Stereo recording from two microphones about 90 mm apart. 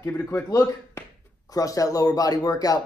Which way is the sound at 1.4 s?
40° left (ahead or behind).